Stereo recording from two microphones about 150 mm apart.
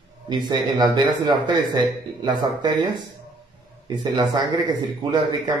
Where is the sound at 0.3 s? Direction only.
30° right (ahead or behind).